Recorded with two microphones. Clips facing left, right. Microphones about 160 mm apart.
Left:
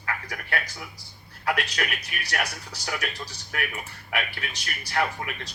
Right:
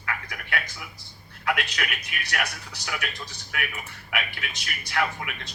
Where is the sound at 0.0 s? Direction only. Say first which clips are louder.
Left 1 dB; 35° left (ahead or behind).